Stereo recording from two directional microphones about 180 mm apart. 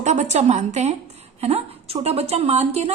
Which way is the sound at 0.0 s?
40° right (ahead or behind).